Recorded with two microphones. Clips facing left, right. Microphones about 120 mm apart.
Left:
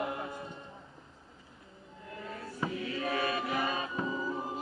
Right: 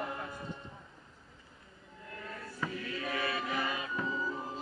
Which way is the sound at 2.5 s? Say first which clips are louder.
Left 4 dB; 20° left (ahead or behind).